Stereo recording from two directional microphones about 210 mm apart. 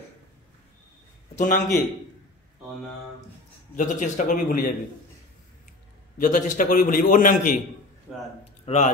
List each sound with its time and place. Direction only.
1.3 s speech: 35° left (ahead or behind)
3.7 s a man's voice: 35° left (ahead or behind)
6.1 s a man's voice: 40° left (ahead or behind)
8.6 s speech: 35° left (ahead or behind)